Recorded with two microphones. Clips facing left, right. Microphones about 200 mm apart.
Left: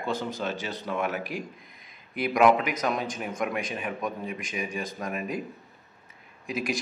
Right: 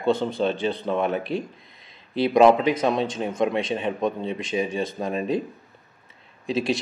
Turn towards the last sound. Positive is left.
turn(degrees=-25)  # may be behind; listen again after turning